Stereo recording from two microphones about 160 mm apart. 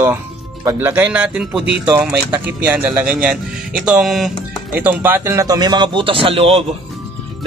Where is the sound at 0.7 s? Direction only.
10° right (ahead or behind).